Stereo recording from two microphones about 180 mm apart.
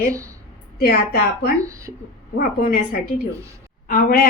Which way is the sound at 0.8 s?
55° left (ahead or behind).